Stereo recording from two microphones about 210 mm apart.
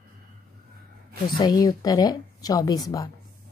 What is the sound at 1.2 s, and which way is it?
Speech, 20° left (ahead or behind).